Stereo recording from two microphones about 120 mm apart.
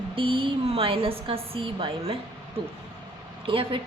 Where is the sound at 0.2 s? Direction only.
45° right (ahead or behind).